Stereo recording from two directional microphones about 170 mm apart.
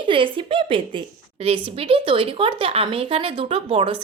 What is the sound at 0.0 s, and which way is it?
A woman's voice, 30° right (ahead or behind).